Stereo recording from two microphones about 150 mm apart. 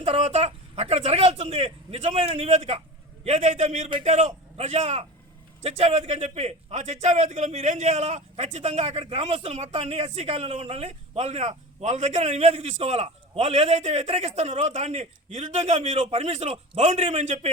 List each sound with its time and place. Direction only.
0.0 s a man's voice: 45° right (ahead or behind)